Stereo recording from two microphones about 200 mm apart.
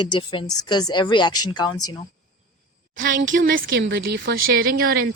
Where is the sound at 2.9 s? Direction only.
40° right (ahead or behind).